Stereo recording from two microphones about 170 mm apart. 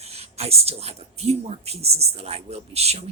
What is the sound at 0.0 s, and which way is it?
Speech, 40° right (ahead or behind).